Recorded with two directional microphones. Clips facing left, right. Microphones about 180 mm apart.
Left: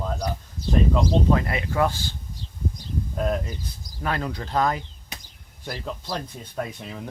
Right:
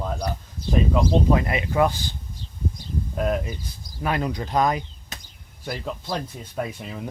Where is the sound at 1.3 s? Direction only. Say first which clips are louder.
Right 1 dB; 15° right (ahead or behind).